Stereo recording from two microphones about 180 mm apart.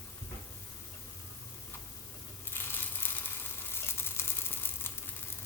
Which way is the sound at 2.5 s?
10° left (ahead or behind).